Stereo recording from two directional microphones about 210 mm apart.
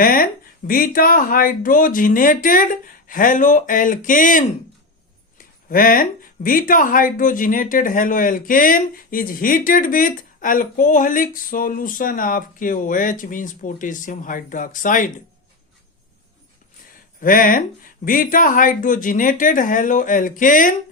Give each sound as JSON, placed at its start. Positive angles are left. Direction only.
{"t": 0.0, "sound": "a sound", "side_deg": 45}
{"t": 0.7, "sound": "speech", "side_deg": 40}
{"t": 17.2, "sound": "speech", "side_deg": 40}